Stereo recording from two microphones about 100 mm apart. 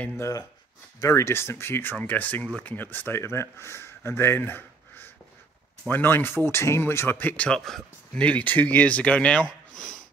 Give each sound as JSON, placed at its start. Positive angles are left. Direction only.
{"t": 0.2, "sound": "speech", "side_deg": 35}